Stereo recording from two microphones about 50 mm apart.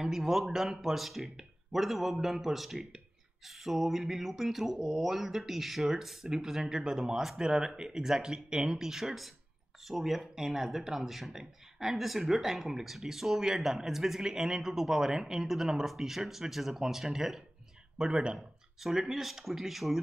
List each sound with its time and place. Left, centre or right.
0.0 s speech: centre
18.8 s speech: centre